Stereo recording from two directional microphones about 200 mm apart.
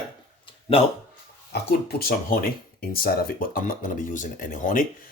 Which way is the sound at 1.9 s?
50° left (ahead or behind).